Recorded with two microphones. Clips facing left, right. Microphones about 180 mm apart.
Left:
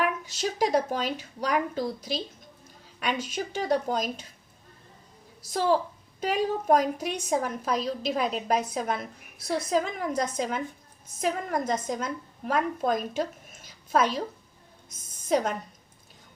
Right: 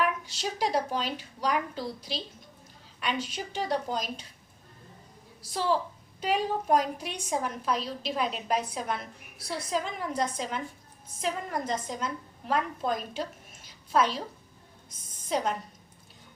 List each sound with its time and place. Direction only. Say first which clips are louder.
0.3 s a woman's voice: left 4 dB; 45° left (ahead or behind)
6.1 s a woman's voice: left 2 dB; 45° left (ahead or behind)
14.8 s a sound: left 7 dB; 45° left (ahead or behind)